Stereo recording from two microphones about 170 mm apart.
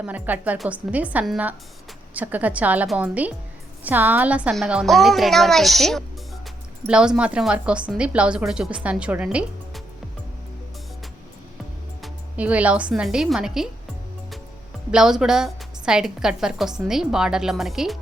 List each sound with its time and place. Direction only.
0.0 s a woman's voice: 10° right (ahead or behind)
12.0 s speech: 10° right (ahead or behind)
14.8 s a woman's voice: 5° right (ahead or behind)